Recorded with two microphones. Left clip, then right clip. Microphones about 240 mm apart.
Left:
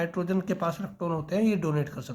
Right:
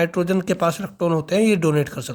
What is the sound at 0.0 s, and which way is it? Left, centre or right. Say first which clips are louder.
Speech: right 9 dB; right.